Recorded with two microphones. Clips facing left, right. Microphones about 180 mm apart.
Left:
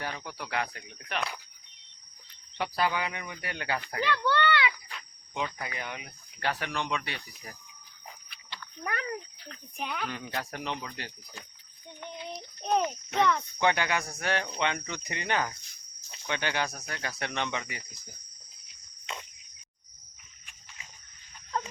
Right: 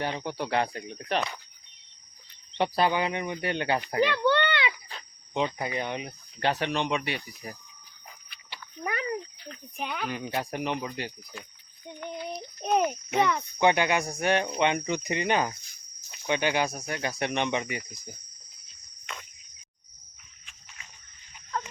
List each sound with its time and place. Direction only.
0.0 s speech: 25° right (ahead or behind)
2.5 s speech: 25° right (ahead or behind)
8.4 s a sound: 5° right (ahead or behind)
10.2 s speech: 15° right (ahead or behind)
12.6 s speech: 10° right (ahead or behind)